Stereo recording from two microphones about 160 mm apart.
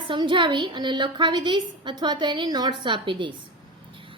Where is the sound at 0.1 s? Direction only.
30° right (ahead or behind).